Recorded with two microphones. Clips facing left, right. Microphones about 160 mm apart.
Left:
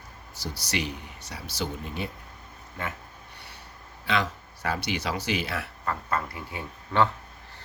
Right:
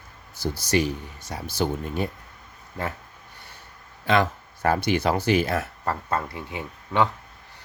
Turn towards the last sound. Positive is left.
turn(degrees=-15)  # may be behind; listen again after turning